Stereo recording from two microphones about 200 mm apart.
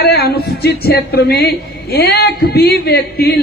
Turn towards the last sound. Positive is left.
turn(degrees=50)  # may be behind; listen again after turning